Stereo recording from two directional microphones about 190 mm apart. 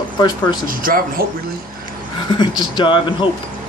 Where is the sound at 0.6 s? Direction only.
50° right (ahead or behind).